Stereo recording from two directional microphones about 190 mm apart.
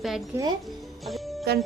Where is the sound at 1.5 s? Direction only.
60° right (ahead or behind).